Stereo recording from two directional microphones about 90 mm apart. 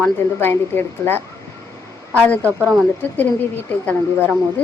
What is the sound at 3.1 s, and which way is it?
Speech, 20° left (ahead or behind).